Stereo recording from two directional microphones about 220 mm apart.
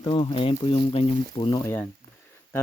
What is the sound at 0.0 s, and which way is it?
Speech, 20° left (ahead or behind).